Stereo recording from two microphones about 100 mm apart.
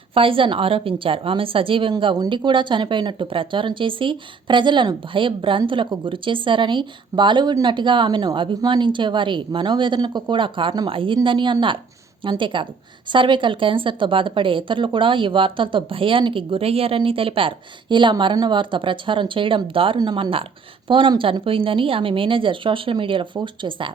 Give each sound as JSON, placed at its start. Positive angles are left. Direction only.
{"t": 0.1, "sound": "a woman's voice", "side_deg": -65}